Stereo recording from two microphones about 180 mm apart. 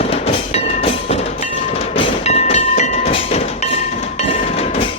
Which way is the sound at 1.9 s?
35° left (ahead or behind).